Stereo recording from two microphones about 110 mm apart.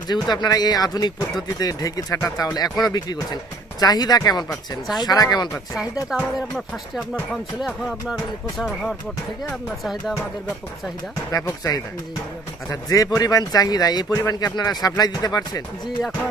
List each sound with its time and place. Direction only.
0.1 s speech: 40° left (ahead or behind)
5.8 s speech: 5° right (ahead or behind)
11.3 s speech: 30° left (ahead or behind)